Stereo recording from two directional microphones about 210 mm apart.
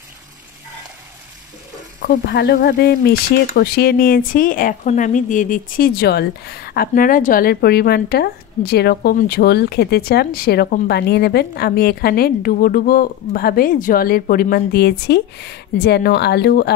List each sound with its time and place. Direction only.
2.0 s speech: 50° left (ahead or behind)